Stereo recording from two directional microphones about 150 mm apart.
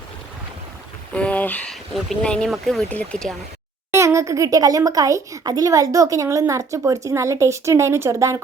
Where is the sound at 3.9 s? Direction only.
20° right (ahead or behind).